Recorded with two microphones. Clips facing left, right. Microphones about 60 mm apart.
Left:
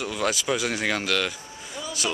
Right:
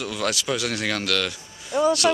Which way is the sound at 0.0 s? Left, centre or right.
Centre.